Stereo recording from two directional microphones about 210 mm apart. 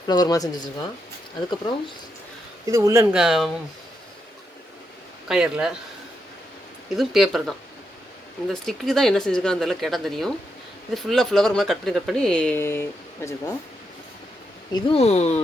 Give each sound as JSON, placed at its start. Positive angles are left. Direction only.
{"t": 0.1, "sound": "speech", "side_deg": 20}
{"t": 2.6, "sound": "speech", "side_deg": -15}
{"t": 5.3, "sound": "speech", "side_deg": -5}
{"t": 6.9, "sound": "speech", "side_deg": 0}
{"t": 14.7, "sound": "speech", "side_deg": 25}